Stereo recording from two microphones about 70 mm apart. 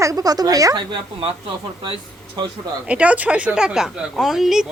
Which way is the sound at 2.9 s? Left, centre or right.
Centre.